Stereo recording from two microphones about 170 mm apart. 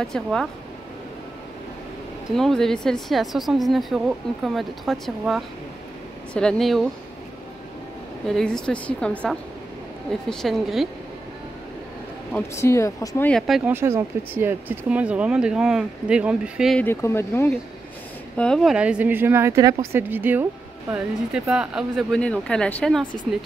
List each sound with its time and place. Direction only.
0.0 s speech: 5° left (ahead or behind)
2.3 s speech: centre (ahead or behind)
8.3 s speech: 5° left (ahead or behind)
10.3 s speech: centre (ahead or behind)
12.5 s speech: 15° left (ahead or behind)
13.3 s speech: centre (ahead or behind)
13.7 s speech: 15° right (ahead or behind)
16.7 s speech: 15° left (ahead or behind)